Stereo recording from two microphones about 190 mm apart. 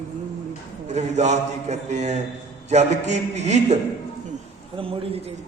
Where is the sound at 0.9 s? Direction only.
35° right (ahead or behind).